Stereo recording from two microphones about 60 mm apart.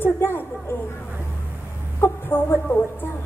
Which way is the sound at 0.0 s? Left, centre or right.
Left.